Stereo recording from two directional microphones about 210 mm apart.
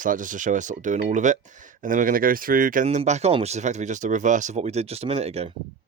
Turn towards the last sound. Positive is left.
turn(degrees=-30)  # may be behind; listen again after turning